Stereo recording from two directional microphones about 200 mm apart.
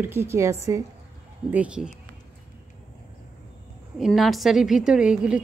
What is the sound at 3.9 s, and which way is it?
A woman's voice, centre (ahead or behind).